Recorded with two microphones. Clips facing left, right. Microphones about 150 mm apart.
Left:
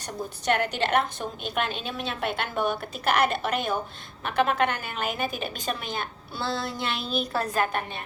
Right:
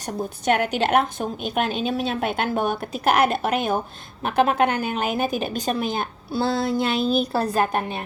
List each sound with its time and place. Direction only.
0.0 s a woman's voice: 50° right (ahead or behind)